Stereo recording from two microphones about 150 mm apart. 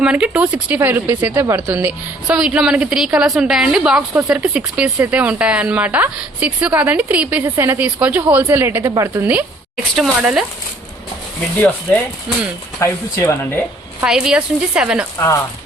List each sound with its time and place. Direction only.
0.0 s a woman's voice: 10° right (ahead or behind)
9.9 s a woman's voice: 5° right (ahead or behind)
12.8 s speech: 20° left (ahead or behind)
14.0 s a woman's voice: 5° right (ahead or behind)